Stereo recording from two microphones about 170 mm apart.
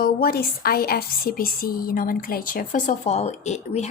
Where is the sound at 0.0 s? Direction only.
60° left (ahead or behind).